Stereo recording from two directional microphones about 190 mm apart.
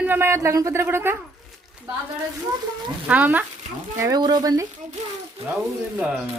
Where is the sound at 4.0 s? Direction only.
20° right (ahead or behind).